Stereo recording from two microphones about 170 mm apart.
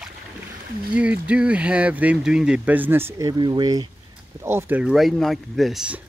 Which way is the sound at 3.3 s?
25° right (ahead or behind).